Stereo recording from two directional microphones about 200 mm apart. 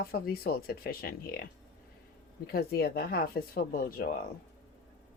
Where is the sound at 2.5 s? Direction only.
50° left (ahead or behind).